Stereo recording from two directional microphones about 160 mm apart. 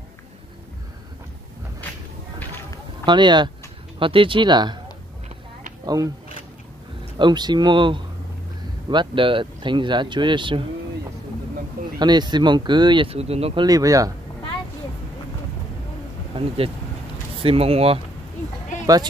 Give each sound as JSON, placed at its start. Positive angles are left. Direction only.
{"t": 3.1, "sound": "speech", "side_deg": -30}
{"t": 7.2, "sound": "speech", "side_deg": -30}
{"t": 12.0, "sound": "speech", "side_deg": -25}
{"t": 13.7, "sound": "speech", "side_deg": -20}
{"t": 16.3, "sound": "speech", "side_deg": -35}